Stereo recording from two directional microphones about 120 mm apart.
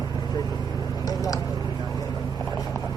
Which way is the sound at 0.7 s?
30° left (ahead or behind).